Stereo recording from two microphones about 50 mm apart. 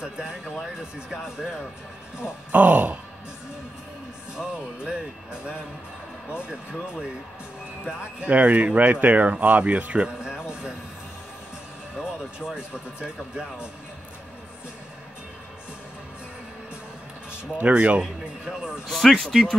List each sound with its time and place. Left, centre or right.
0.0 s speech: centre
2.5 s speech: right
4.4 s speech: centre
8.3 s speech: right
11.9 s speech: centre
17.6 s speech: right
18.0 s speech: centre
18.9 s speech: centre